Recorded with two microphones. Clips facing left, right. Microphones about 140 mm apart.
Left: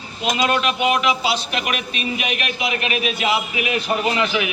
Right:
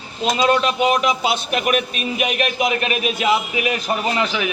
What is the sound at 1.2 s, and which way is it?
A man's voice, 50° right (ahead or behind).